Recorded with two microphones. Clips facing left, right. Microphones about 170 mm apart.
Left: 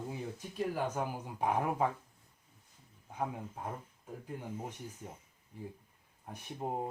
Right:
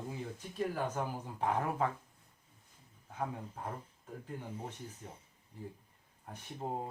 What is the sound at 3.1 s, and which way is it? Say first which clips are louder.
Speech: left 1 dB; 15° left (ahead or behind).